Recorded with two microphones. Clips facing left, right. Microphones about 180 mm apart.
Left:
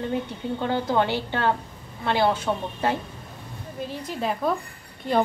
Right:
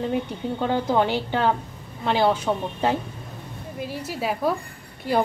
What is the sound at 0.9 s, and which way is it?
A woman's voice, 15° right (ahead or behind).